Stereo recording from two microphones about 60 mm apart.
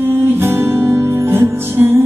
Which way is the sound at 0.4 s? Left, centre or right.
Right.